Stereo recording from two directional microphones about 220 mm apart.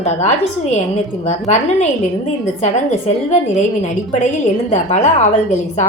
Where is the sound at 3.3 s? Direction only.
30° left (ahead or behind).